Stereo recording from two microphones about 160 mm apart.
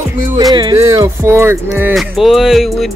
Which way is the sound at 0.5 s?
25° right (ahead or behind).